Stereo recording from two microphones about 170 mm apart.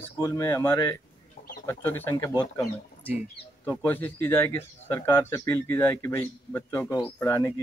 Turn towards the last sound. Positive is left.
turn(degrees=15)  # may be behind; listen again after turning